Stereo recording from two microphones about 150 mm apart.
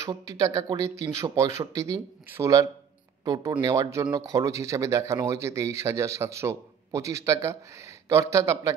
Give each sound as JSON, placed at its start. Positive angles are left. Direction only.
{"t": 0.0, "sound": "speech", "side_deg": -20}